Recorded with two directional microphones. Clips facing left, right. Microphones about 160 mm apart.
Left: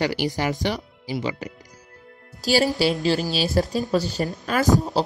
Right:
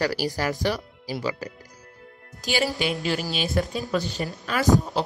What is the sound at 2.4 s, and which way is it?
Speech, 35° left (ahead or behind).